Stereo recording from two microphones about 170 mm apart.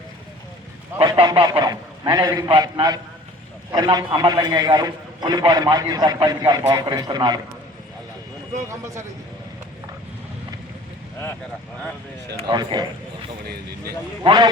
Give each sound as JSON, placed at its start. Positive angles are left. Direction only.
{"t": 0.9, "sound": "a man's voice", "side_deg": -30}
{"t": 12.5, "sound": "a man's voice", "side_deg": -25}
{"t": 14.3, "sound": "a man's voice", "side_deg": -25}